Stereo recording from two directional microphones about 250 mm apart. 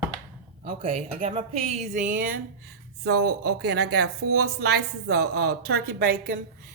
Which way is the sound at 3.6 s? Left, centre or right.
Right.